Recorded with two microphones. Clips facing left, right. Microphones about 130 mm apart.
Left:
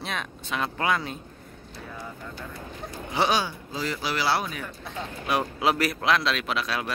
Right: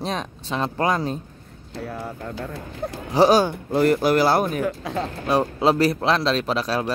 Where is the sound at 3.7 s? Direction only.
55° right (ahead or behind).